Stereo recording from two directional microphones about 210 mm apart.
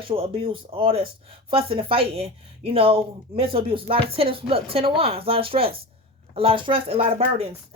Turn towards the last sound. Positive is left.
turn(degrees=-25)  # may be behind; listen again after turning